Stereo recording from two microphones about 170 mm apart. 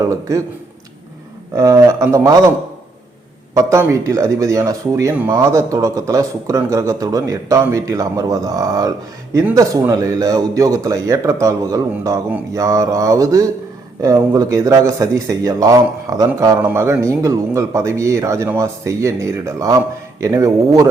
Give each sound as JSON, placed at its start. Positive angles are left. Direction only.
{"t": 0.0, "sound": "a man's voice", "side_deg": -20}
{"t": 1.5, "sound": "a man's voice", "side_deg": -20}
{"t": 3.5, "sound": "a man's voice", "side_deg": -20}